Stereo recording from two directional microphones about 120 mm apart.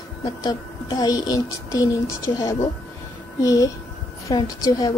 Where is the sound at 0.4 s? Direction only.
35° left (ahead or behind).